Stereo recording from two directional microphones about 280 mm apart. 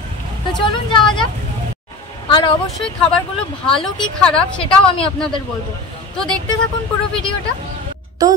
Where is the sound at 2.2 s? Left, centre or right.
Centre.